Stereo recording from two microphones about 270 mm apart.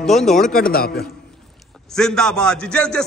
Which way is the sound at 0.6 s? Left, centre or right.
Left.